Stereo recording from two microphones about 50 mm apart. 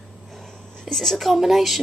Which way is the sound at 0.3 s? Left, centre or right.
Centre.